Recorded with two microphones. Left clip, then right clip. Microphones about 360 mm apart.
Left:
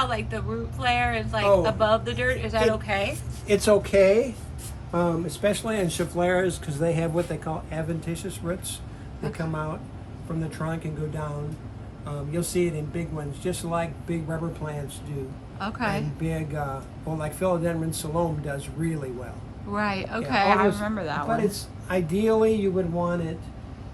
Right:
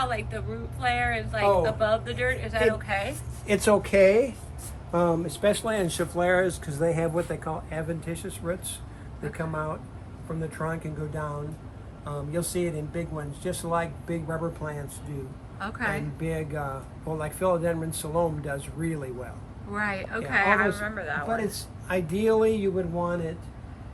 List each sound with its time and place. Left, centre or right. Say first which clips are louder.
0.0 s speech: left 2 dB; centre
3.4 s speech: left 2 dB; centre
15.5 s speech: left 2 dB; centre